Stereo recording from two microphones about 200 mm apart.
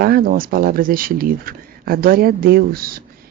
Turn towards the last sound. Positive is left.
turn(degrees=-45)  # may be behind; listen again after turning